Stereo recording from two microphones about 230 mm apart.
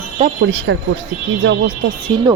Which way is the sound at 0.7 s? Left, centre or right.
Right.